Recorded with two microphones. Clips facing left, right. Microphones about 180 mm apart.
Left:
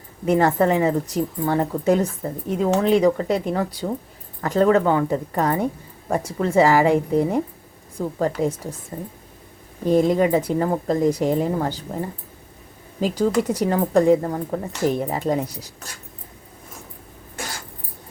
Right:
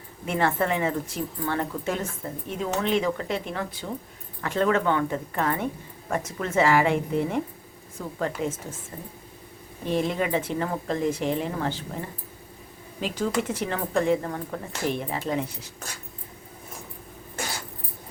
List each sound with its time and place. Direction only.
0.3 s a woman's voice: 40° left (ahead or behind)
9.8 s a woman's voice: 40° left (ahead or behind)